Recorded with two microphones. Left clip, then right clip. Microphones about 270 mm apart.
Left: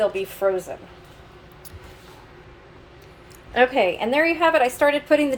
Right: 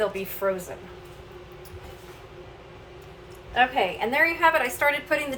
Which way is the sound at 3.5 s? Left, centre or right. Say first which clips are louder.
Left 4 dB; left.